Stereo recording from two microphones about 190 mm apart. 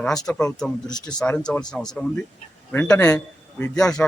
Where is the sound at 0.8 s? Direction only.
20° left (ahead or behind).